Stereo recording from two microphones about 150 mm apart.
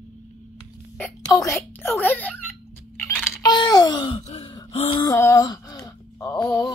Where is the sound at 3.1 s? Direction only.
25° left (ahead or behind).